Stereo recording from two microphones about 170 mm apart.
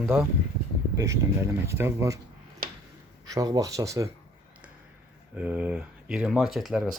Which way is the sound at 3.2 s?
20° right (ahead or behind).